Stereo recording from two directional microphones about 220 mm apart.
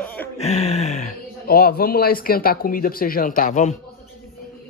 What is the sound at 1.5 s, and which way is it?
Speech, 45° left (ahead or behind).